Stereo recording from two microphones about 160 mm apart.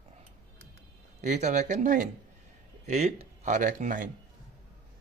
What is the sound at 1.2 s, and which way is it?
Speech, 50° right (ahead or behind).